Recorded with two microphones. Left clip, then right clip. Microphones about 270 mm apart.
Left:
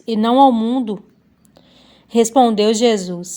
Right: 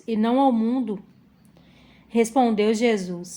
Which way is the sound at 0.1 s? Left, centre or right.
Left.